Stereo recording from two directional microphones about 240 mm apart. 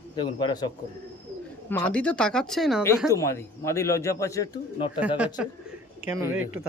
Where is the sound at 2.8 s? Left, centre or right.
Centre.